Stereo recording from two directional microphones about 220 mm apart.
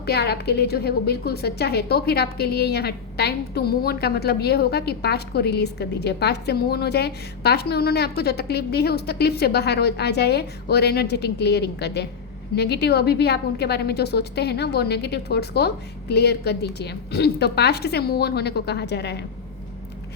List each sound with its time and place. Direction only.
0.0 s a woman's voice: 45° left (ahead or behind)